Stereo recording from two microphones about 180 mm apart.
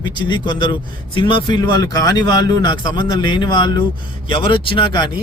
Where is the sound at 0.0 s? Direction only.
25° left (ahead or behind).